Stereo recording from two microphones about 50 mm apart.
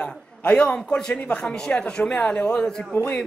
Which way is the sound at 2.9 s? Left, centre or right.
Left.